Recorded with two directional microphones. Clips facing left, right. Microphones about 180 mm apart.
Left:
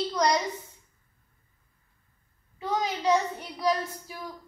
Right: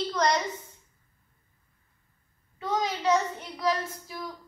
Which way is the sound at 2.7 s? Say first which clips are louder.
Even; 15° left (ahead or behind).